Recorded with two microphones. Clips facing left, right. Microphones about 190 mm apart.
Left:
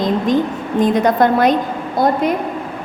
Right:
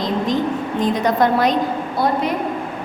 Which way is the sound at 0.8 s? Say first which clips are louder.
Left 5 dB; 50° left (ahead or behind).